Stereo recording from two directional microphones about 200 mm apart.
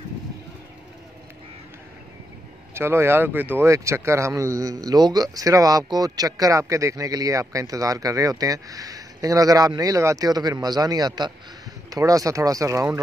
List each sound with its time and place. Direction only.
2.7 s speech: 10° right (ahead or behind)